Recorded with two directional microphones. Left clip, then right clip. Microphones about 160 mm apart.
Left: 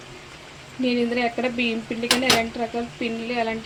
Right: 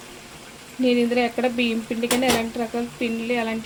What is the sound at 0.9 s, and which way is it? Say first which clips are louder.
Speech: right 2 dB; 5° right (ahead or behind).